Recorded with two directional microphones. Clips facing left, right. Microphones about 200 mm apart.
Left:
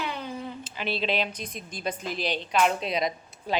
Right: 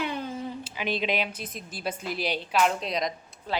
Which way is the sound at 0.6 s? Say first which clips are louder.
Even; 15° right (ahead or behind).